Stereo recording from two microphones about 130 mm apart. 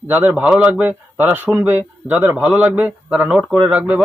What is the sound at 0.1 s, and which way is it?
A man's voice, 15° right (ahead or behind).